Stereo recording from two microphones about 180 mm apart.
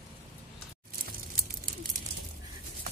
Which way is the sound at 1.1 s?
55° right (ahead or behind).